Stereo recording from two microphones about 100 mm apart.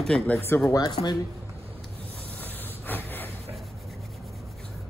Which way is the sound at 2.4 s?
20° left (ahead or behind).